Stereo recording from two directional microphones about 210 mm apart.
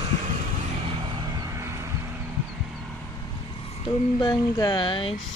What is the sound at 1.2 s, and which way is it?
Vehicle, 15° right (ahead or behind).